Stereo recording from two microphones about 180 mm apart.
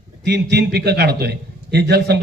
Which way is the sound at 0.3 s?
65° right (ahead or behind).